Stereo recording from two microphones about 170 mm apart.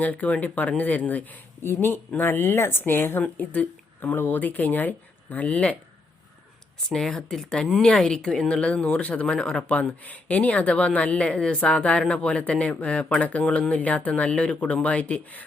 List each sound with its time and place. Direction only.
0.0 s speech: 10° left (ahead or behind)
6.9 s speech: 5° left (ahead or behind)